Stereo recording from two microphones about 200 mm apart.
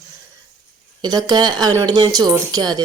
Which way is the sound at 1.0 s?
20° right (ahead or behind).